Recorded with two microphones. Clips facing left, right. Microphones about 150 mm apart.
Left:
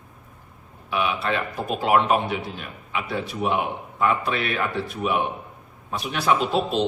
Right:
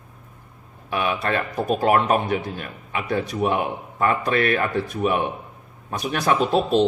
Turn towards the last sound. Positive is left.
turn(degrees=-45)  # may be behind; listen again after turning